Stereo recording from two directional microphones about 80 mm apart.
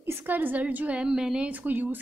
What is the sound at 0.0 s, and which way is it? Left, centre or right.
A woman's voice, right.